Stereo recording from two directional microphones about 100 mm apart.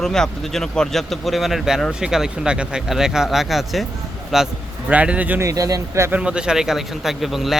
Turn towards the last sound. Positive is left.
turn(degrees=0)  # may be behind; listen again after turning